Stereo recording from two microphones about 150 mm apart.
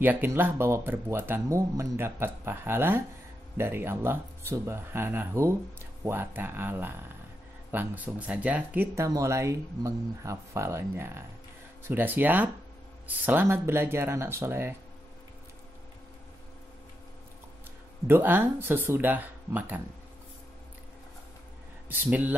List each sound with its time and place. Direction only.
0.0 s speech: 15° right (ahead or behind)
18.0 s speech: 15° right (ahead or behind)
21.8 s speech: 10° right (ahead or behind)